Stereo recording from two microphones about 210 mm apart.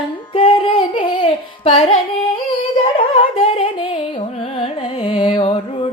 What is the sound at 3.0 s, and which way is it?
Carnatic music, 25° left (ahead or behind).